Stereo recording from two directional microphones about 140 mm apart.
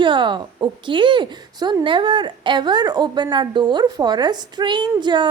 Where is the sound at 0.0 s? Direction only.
35° right (ahead or behind).